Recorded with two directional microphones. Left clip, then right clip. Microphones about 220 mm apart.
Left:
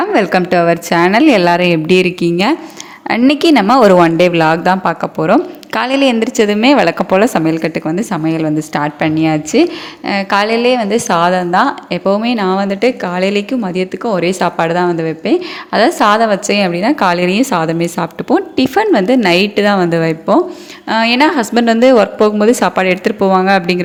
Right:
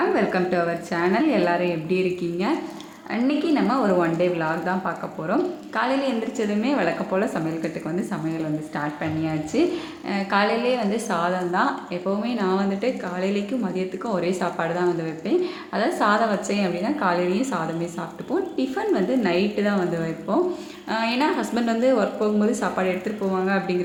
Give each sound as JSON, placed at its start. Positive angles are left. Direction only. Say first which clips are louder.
{"t": 0.1, "sound": "a woman's voice", "louder": "left 10 dB", "side_deg": 40}